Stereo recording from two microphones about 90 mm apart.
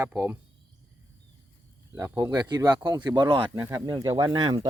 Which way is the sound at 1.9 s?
40° right (ahead or behind).